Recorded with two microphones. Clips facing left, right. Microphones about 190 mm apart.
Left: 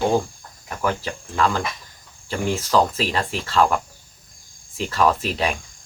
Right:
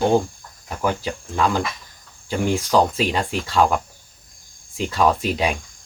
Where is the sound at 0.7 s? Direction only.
15° right (ahead or behind).